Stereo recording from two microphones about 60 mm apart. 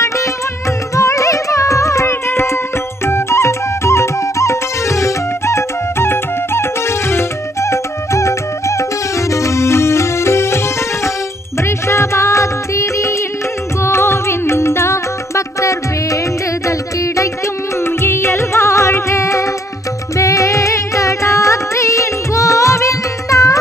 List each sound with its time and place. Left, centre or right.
0.9 s music: left
11.9 s music: left
13.8 s music: left
17.8 s music: left